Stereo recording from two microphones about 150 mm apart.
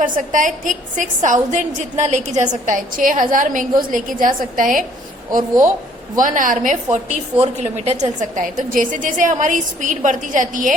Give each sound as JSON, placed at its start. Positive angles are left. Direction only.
{"t": 0.0, "sound": "a woman's voice", "side_deg": -60}